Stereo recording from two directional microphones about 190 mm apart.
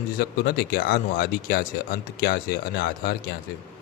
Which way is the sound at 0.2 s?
55° left (ahead or behind).